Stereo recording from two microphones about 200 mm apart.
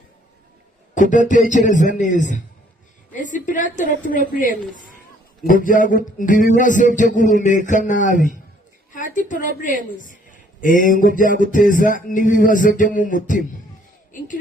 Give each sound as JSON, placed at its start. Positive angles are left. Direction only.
{"t": 0.9, "sound": "a man's voice", "side_deg": 40}